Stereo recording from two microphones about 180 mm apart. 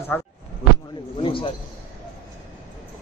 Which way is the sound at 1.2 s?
30° left (ahead or behind).